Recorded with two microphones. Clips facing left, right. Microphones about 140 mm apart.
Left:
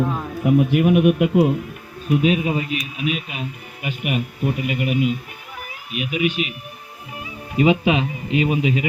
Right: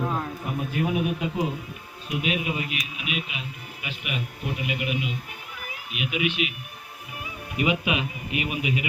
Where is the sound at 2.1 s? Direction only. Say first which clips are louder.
Left 9 dB; 35° left (ahead or behind).